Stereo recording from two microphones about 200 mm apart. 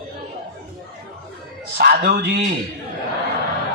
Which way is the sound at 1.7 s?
55° right (ahead or behind).